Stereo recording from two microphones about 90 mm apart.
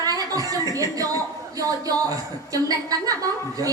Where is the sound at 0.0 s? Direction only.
45° right (ahead or behind).